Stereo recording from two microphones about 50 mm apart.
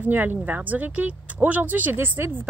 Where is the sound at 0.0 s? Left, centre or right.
Right.